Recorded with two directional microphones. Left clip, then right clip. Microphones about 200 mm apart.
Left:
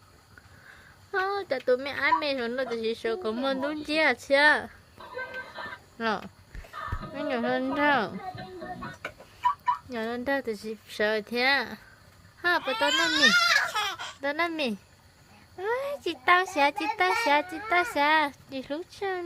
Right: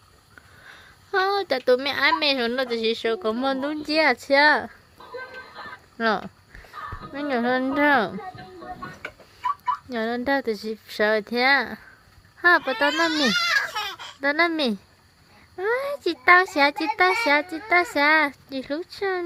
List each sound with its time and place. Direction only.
0.7 s a woman's voice: 25° right (ahead or behind)
6.0 s a woman's voice: 25° right (ahead or behind)
9.9 s a woman's voice: 25° right (ahead or behind)
13.7 s a sound: 50° left (ahead or behind)
14.2 s a woman's voice: 35° right (ahead or behind)